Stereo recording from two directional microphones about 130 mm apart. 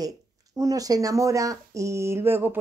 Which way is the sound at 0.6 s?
30° right (ahead or behind).